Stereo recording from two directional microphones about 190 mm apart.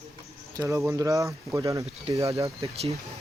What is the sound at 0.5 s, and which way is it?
Speech, 15° right (ahead or behind).